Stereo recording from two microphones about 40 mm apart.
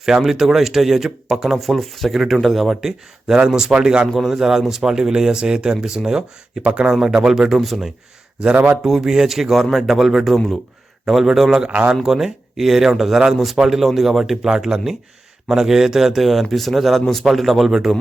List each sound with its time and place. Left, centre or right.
0.0 s speech: centre
3.3 s speech: centre
6.6 s speech: right
7.0 s speech: centre
8.8 s speech: centre
10.3 s speech: centre
11.0 s speech: centre